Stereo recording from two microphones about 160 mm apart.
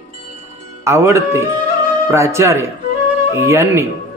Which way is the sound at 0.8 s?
15° right (ahead or behind).